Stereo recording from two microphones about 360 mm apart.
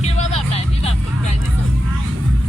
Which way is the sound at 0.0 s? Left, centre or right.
Centre.